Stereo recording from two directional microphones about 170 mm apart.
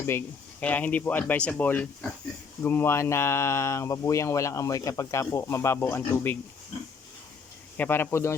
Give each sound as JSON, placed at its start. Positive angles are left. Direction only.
{"t": 0.0, "sound": "speech", "side_deg": 15}
{"t": 7.8, "sound": "speech", "side_deg": 10}